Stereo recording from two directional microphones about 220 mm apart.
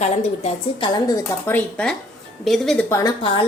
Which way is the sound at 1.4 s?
5° left (ahead or behind).